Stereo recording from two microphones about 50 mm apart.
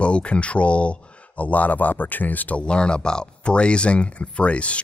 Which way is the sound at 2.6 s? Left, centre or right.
Centre.